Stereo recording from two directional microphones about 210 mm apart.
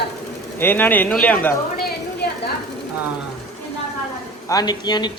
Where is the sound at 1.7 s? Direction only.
50° left (ahead or behind).